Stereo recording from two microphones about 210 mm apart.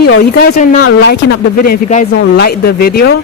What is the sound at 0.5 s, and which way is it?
Speech, 50° left (ahead or behind).